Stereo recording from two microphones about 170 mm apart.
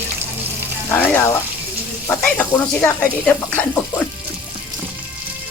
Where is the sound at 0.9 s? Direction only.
10° left (ahead or behind).